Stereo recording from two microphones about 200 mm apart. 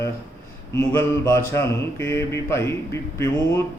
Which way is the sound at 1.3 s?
15° left (ahead or behind).